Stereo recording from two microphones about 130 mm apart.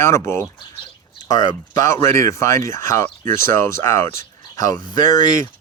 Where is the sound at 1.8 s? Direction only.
20° left (ahead or behind).